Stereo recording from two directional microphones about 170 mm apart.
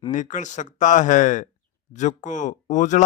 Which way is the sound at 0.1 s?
50° left (ahead or behind).